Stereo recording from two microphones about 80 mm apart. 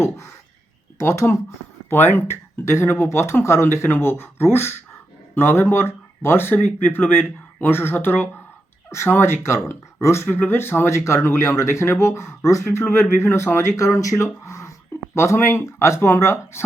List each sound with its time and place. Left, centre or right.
0.9 s speech: left
10.2 s speech: left